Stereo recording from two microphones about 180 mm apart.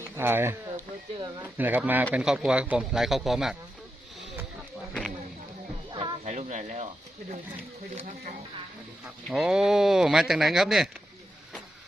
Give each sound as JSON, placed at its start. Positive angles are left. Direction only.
{"t": 0.2, "sound": "speech", "side_deg": -10}
{"t": 5.9, "sound": "music", "side_deg": -25}
{"t": 6.2, "sound": "speech", "side_deg": -40}
{"t": 9.3, "sound": "speech", "side_deg": -5}